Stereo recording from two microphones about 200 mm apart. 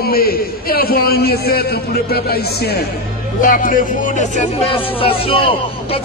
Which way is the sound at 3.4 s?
40° left (ahead or behind).